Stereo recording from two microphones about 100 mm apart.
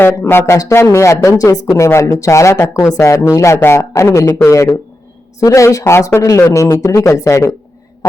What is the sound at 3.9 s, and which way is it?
A man's voice, 35° left (ahead or behind).